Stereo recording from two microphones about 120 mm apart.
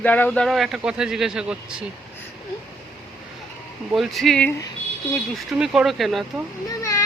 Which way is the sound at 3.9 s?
Centre (ahead or behind).